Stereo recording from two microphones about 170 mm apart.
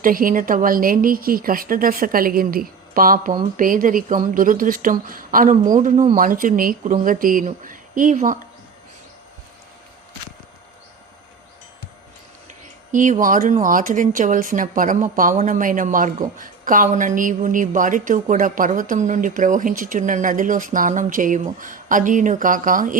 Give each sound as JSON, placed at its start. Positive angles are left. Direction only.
{"t": 0.0, "sound": "a woman's voice", "side_deg": -55}
{"t": 12.9, "sound": "a woman's voice", "side_deg": -50}